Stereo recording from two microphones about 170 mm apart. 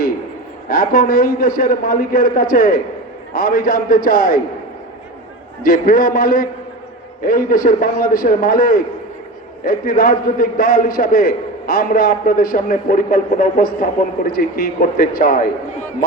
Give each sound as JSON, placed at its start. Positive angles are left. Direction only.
{"t": 0.7, "sound": "a man's voice", "side_deg": 55}
{"t": 5.6, "sound": "a man's voice", "side_deg": 55}